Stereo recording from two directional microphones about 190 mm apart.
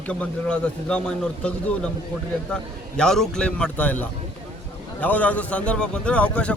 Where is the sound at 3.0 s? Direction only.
5° left (ahead or behind).